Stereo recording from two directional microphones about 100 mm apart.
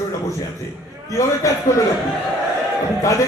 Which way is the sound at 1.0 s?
30° left (ahead or behind).